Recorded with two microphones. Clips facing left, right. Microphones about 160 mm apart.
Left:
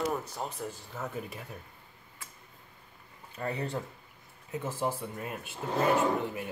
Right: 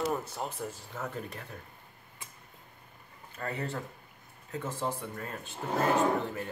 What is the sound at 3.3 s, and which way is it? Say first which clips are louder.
Speech: left 2 dB; 20° left (ahead or behind).